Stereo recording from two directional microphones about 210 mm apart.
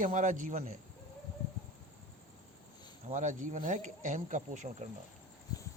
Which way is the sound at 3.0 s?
35° right (ahead or behind).